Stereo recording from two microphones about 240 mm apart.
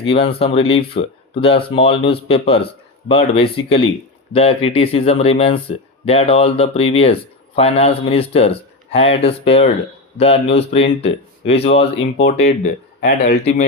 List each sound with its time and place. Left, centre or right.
0.0 s speech: left
13.0 s speech: left